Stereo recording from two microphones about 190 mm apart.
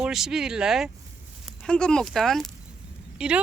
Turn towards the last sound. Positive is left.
turn(degrees=-5)  # may be behind; listen again after turning